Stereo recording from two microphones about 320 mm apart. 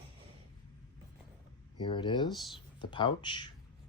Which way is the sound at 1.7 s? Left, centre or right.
Centre.